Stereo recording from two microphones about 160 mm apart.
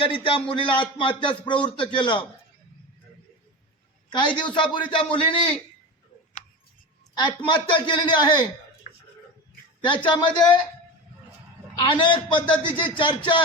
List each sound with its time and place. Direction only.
0.0 s speech: 35° left (ahead or behind)
4.4 s speech: 30° left (ahead or behind)
7.2 s a man's voice: 30° left (ahead or behind)
9.8 s a man's voice: 30° left (ahead or behind)
11.8 s speech: 30° left (ahead or behind)